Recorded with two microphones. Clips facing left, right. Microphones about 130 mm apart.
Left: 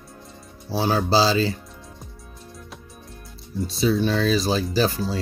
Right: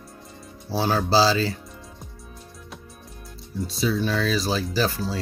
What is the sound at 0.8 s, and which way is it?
Speech, 20° left (ahead or behind).